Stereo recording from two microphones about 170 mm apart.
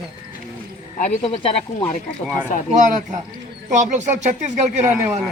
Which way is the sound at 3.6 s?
45° right (ahead or behind).